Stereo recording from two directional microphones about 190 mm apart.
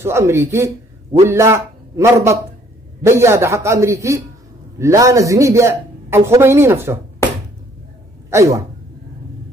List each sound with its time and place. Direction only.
0.0 s a man's voice: 15° right (ahead or behind)
8.3 s a man's voice: 15° right (ahead or behind)